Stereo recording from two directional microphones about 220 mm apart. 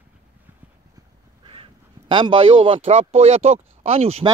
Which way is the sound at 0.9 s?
25° right (ahead or behind).